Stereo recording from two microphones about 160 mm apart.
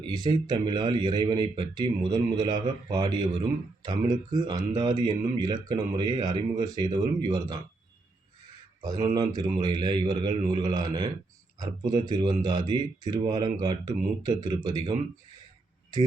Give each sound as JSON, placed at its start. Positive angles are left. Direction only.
{"t": 0.0, "sound": "a man's voice", "side_deg": -25}
{"t": 8.8, "sound": "a man's voice", "side_deg": -25}